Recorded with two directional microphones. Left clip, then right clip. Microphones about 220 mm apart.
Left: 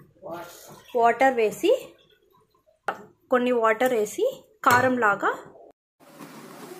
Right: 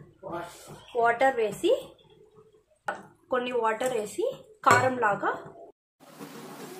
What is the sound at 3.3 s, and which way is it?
Speech, 30° left (ahead or behind).